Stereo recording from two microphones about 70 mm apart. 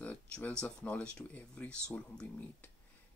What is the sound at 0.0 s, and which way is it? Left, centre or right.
Speech, centre.